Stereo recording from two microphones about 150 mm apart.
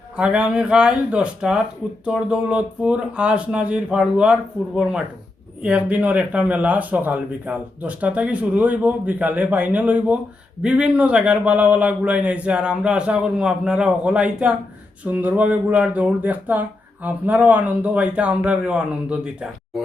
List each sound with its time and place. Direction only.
0.2 s speech: 10° right (ahead or behind)